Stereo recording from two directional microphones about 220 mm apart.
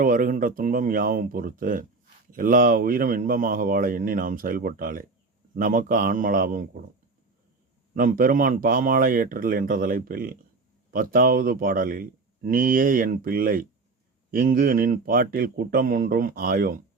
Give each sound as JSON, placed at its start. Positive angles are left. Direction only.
{"t": 0.0, "sound": "speech", "side_deg": -40}
{"t": 7.9, "sound": "speech", "side_deg": -40}